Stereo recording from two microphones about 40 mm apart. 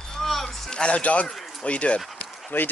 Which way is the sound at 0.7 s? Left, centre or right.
Left.